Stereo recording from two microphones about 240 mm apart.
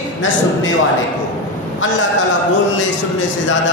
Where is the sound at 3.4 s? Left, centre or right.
Left.